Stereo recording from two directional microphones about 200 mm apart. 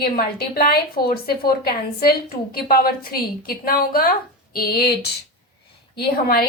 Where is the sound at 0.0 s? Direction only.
50° left (ahead or behind).